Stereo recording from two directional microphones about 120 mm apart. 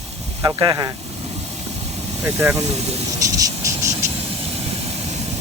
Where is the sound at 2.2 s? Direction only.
20° right (ahead or behind).